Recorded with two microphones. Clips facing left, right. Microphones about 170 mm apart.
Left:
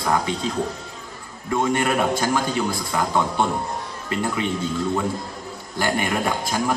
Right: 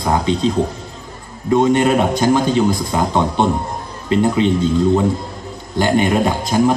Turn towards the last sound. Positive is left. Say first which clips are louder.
# right 8 dB
turn(degrees=-25)  # may be behind; listen again after turning